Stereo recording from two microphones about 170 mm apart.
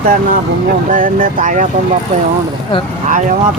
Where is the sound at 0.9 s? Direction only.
55° right (ahead or behind).